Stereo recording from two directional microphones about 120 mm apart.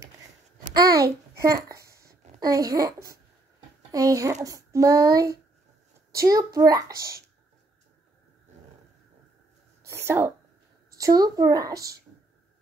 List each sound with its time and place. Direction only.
0.8 s a child's voice: 30° right (ahead or behind)
9.8 s a child's voice: 20° right (ahead or behind)
11.0 s a child's voice: 30° right (ahead or behind)